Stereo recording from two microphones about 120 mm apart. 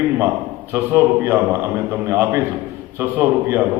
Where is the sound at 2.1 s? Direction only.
20° right (ahead or behind).